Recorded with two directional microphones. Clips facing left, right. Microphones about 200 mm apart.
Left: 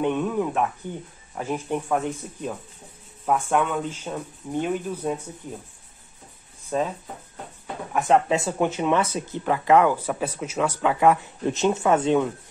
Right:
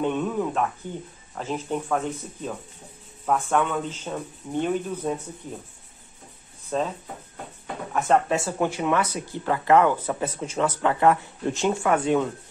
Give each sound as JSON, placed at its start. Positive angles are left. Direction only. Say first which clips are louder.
{"t": 0.0, "sound": "speech", "louder": "left 1 dB", "side_deg": 15}
{"t": 3.3, "sound": "speech", "louder": "left 1 dB", "side_deg": 10}
{"t": 6.7, "sound": "speech", "louder": "left 1 dB", "side_deg": 5}